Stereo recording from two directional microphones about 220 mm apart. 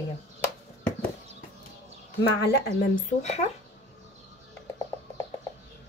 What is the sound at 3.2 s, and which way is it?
Speech, 30° left (ahead or behind).